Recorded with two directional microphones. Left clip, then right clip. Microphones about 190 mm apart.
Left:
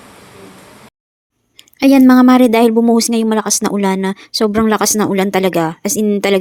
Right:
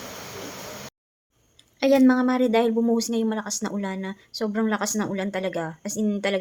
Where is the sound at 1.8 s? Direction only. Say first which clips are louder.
Left 10 dB; 45° left (ahead or behind).